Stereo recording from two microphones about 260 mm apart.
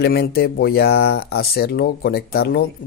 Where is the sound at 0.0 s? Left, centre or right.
Left.